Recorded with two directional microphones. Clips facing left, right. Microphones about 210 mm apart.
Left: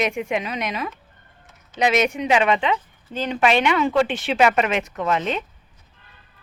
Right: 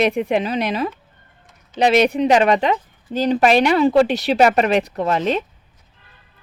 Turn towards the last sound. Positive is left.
turn(degrees=-35)  # may be behind; listen again after turning